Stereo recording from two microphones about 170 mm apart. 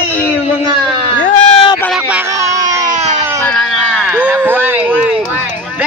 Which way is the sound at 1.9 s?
10° right (ahead or behind).